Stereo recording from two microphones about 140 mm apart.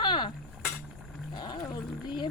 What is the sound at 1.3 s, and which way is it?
Roaring cats, 30° left (ahead or behind).